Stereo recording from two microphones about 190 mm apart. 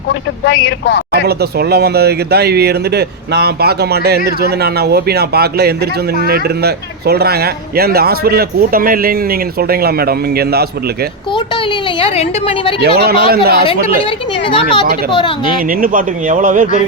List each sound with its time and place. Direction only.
0.1 s speech: 75° left (ahead or behind)
1.1 s speech: 60° right (ahead or behind)
11.3 s speech: 25° left (ahead or behind)
12.8 s speech: 55° right (ahead or behind)
14.4 s speech: 25° left (ahead or behind)
15.6 s speech: 45° right (ahead or behind)